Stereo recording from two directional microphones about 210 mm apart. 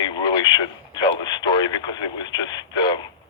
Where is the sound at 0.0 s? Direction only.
20° left (ahead or behind).